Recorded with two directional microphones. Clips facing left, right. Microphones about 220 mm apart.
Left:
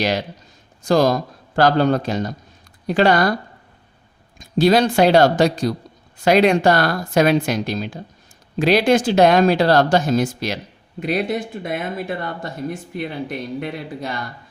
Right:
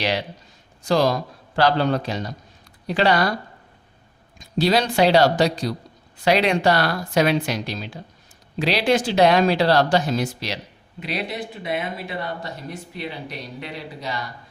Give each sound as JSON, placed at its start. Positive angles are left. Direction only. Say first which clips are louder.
{"t": 0.0, "sound": "speech", "louder": "left 3 dB", "side_deg": 45}
{"t": 4.4, "sound": "speech", "louder": "left 5 dB", "side_deg": 50}